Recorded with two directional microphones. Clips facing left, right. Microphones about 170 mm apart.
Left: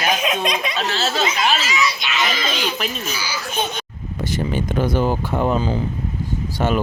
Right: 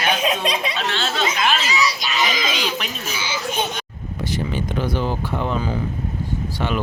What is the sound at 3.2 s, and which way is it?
Speech, 25° right (ahead or behind).